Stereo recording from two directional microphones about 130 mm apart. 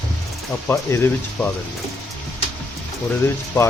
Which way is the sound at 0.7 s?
20° left (ahead or behind).